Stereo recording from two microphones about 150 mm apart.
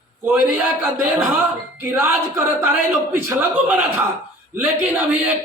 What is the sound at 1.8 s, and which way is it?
Speech, 15° right (ahead or behind).